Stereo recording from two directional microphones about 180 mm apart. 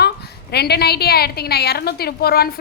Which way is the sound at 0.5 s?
65° left (ahead or behind).